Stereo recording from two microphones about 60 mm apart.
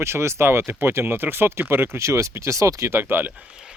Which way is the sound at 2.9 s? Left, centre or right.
Right.